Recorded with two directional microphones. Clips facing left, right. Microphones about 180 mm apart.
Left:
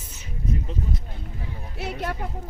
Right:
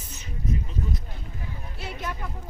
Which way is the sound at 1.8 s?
65° left (ahead or behind).